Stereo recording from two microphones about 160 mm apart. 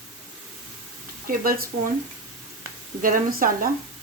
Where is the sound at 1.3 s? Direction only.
65° right (ahead or behind).